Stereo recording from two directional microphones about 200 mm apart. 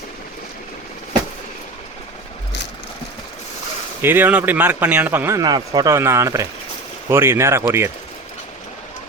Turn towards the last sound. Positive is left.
turn(degrees=-15)  # may be behind; listen again after turning